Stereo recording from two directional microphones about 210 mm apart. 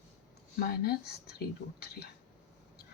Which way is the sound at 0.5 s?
45° left (ahead or behind).